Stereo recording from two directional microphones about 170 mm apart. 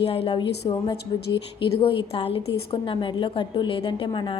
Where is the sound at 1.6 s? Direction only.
30° left (ahead or behind).